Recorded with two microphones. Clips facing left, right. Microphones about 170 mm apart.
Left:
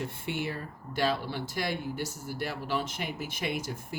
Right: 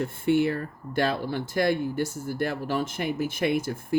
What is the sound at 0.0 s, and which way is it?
Speech, 50° right (ahead or behind).